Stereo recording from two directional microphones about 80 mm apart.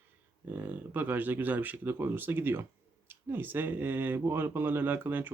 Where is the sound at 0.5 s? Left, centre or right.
Right.